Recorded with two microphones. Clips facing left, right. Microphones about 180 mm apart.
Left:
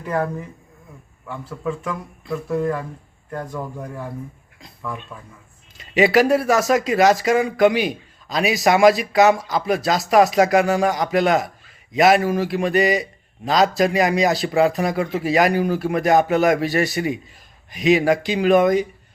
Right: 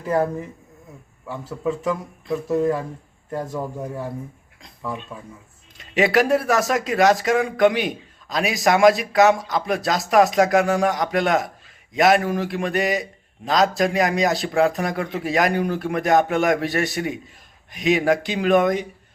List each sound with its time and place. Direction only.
0.0 s speech: 25° right (ahead or behind)
2.3 s speech: 20° right (ahead or behind)
5.7 s speech: centre (ahead or behind)